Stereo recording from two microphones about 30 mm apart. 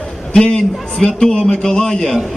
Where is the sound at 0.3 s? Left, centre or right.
Left.